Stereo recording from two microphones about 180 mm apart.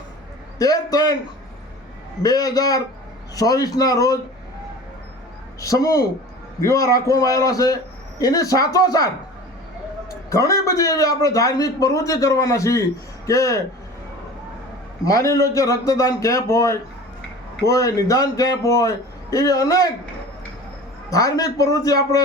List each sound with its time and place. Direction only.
0.6 s a man's voice: 20° left (ahead or behind)
2.2 s a man's voice: 20° left (ahead or behind)
5.5 s a man's voice: 20° left (ahead or behind)
10.2 s a man's voice: 20° left (ahead or behind)
15.0 s a man's voice: 20° left (ahead or behind)
21.1 s a man's voice: 20° left (ahead or behind)